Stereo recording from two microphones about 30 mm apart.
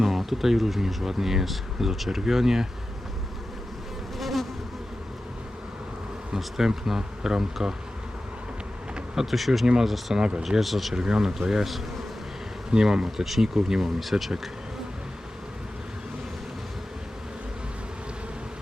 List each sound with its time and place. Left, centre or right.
0.0 s speech: centre
4.2 s bee: centre
6.3 s speech: centre
9.2 s speech: centre
10.2 s speech: right
10.6 s speech: centre
10.9 s speech: right
11.6 s bee: centre
12.7 s speech: right
13.1 s speech: centre
14.0 s speech: centre